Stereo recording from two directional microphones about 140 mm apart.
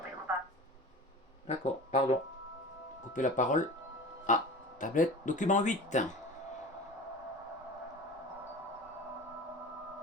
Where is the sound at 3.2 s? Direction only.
65° left (ahead or behind).